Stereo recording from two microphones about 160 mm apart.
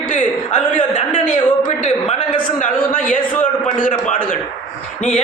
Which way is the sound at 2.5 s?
55° left (ahead or behind).